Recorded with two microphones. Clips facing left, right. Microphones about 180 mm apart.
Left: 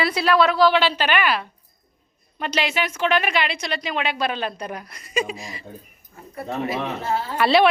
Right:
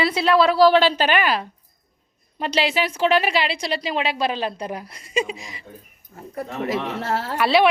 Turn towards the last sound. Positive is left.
turn(degrees=-10)  # may be behind; listen again after turning